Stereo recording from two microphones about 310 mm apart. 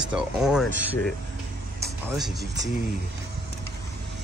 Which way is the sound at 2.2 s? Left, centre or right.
Centre.